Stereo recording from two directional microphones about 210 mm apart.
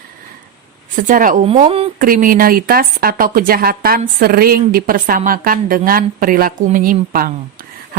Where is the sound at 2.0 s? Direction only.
40° right (ahead or behind).